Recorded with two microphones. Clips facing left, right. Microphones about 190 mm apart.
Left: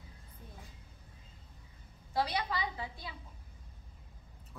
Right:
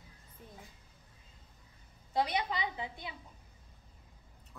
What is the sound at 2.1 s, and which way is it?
A woman's voice, 20° right (ahead or behind).